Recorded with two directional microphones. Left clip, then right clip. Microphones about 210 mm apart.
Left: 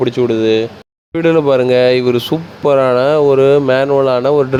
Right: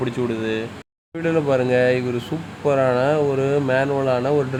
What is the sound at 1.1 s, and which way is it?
Speech, 35° left (ahead or behind).